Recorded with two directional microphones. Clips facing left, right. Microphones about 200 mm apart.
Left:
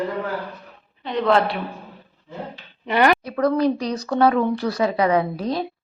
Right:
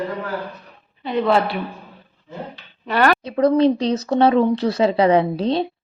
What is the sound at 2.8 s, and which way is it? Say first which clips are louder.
Speech: even; 15° left (ahead or behind).